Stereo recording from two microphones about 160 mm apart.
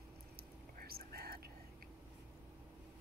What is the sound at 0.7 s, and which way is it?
Whispering, 70° right (ahead or behind).